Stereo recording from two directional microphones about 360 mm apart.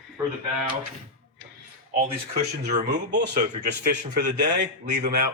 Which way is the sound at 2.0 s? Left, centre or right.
Right.